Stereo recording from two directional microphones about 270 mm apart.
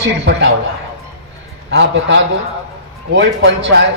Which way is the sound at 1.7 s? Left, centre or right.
Right.